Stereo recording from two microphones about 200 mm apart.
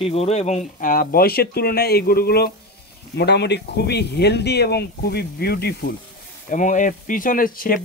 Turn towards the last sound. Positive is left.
turn(degrees=45)  # may be behind; listen again after turning